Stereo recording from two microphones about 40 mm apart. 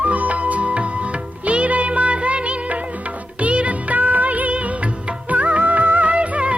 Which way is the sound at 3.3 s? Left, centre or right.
Right.